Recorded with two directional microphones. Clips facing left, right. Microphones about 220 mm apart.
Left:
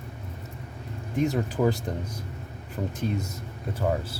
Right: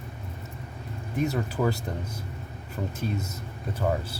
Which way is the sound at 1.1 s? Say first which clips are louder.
Left 2 dB; 15° left (ahead or behind).